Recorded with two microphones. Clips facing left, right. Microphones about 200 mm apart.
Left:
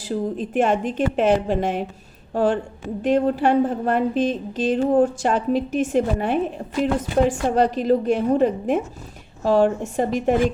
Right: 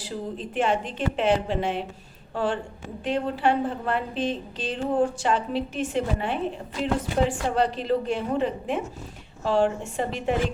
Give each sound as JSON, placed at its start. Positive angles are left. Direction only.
{"t": 0.0, "sound": "a woman's voice", "side_deg": 50}